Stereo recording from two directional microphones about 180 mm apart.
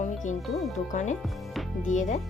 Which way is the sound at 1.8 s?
45° left (ahead or behind).